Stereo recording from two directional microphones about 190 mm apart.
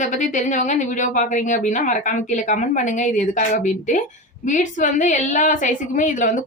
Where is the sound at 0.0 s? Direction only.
40° left (ahead or behind).